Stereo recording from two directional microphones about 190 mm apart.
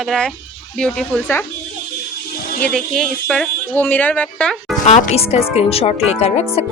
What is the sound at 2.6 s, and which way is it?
Speech, centre (ahead or behind).